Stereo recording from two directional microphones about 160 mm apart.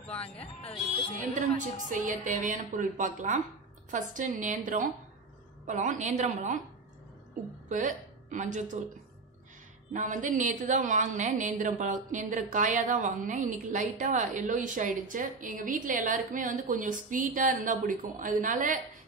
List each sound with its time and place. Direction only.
0.0 s a sound: 10° left (ahead or behind)
0.4 s speech: 40° left (ahead or behind)
1.3 s a woman's voice: 55° right (ahead or behind)
7.8 s a woman's voice: 50° right (ahead or behind)
9.9 s a woman's voice: 50° right (ahead or behind)